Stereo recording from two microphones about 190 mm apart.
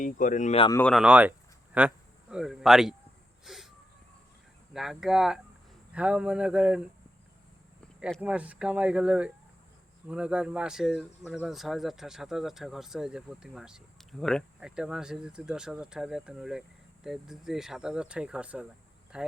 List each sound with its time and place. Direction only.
0.0 s speech: 45° left (ahead or behind)
0.7 s speech: 10° left (ahead or behind)
0.9 s speech: 5° right (ahead or behind)
3.4 s wheeze: centre (ahead or behind)
4.7 s speech: centre (ahead or behind)
8.2 s speech: 5° right (ahead or behind)